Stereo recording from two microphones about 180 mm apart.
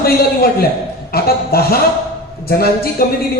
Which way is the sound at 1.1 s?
60° left (ahead or behind).